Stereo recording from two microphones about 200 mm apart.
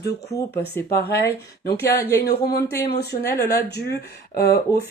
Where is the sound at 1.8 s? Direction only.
50° left (ahead or behind).